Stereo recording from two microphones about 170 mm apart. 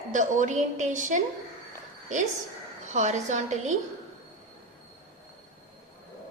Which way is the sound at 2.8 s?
45° right (ahead or behind).